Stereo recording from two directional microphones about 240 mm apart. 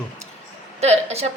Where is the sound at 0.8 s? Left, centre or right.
Right.